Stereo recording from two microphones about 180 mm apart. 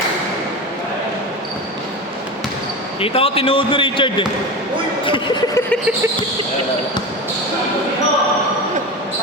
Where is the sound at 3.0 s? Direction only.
30° left (ahead or behind).